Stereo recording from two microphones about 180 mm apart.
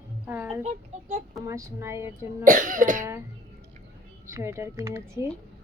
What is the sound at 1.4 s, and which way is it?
Speech, 15° right (ahead or behind).